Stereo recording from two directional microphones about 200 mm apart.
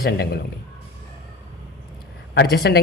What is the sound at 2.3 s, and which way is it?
Speech, 55° left (ahead or behind).